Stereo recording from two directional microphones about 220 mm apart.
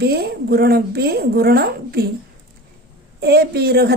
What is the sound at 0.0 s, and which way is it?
Speech, 45° right (ahead or behind).